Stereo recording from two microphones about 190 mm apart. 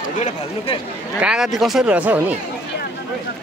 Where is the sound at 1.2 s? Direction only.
5° right (ahead or behind).